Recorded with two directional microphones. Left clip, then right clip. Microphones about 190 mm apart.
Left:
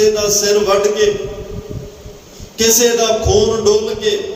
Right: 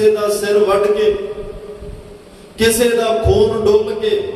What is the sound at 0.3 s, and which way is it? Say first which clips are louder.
Music: left 1 dB; 50° left (ahead or behind).